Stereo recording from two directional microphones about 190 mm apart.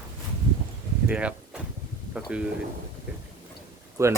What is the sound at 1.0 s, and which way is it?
Speech, 5° right (ahead or behind).